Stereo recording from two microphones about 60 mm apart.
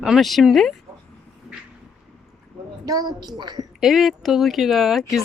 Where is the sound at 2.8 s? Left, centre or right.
Right.